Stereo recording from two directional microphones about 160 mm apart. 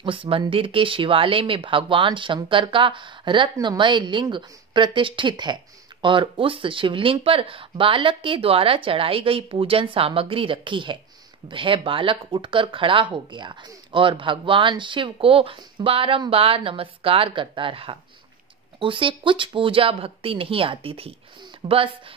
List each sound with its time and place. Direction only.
0.0 s a woman's voice: 35° right (ahead or behind)